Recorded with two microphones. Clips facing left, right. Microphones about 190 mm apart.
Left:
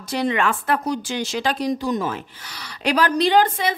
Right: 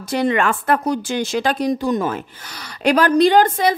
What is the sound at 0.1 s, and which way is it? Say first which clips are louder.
A woman's voice: right 3 dB; 50° right (ahead or behind).